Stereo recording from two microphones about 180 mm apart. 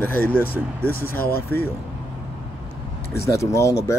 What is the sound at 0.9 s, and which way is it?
Speech, 55° left (ahead or behind).